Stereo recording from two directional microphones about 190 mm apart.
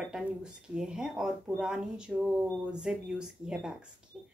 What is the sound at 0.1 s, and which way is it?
Speech, 5° right (ahead or behind).